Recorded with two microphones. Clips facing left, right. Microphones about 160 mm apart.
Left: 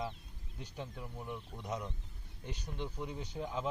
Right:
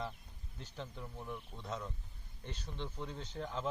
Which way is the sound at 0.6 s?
10° left (ahead or behind).